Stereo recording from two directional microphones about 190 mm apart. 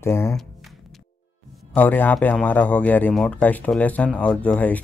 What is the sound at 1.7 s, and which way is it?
A man's voice, 10° left (ahead or behind).